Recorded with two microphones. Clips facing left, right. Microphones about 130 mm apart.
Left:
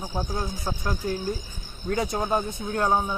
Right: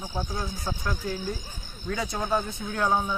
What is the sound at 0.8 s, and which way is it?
Speech, 45° left (ahead or behind).